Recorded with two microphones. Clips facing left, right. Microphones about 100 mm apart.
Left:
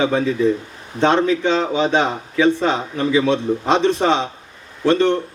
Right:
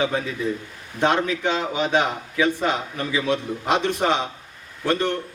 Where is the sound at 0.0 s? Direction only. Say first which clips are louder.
Left 7 dB; 25° left (ahead or behind).